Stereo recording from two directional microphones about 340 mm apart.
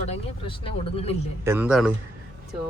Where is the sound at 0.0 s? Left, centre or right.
Centre.